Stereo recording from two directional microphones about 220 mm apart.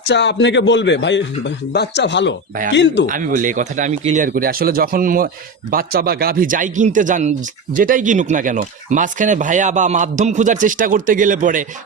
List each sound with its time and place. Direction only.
0.1 s a man's voice: 50° left (ahead or behind)
3.1 s speech: 35° right (ahead or behind)